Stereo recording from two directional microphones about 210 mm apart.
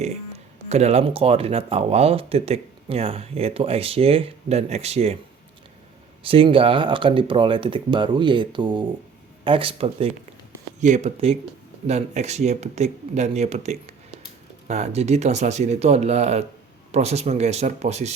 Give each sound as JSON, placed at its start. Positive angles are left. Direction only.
{"t": 0.0, "sound": "speech", "side_deg": -30}
{"t": 6.2, "sound": "speech", "side_deg": -25}